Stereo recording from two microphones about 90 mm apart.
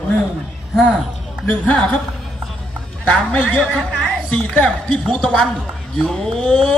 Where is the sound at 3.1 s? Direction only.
15° left (ahead or behind).